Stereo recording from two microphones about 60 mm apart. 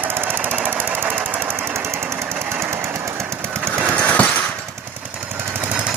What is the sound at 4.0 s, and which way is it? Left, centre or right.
Jackhammer, left.